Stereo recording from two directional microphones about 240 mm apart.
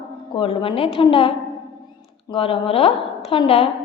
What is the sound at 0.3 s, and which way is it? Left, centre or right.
Speech, left.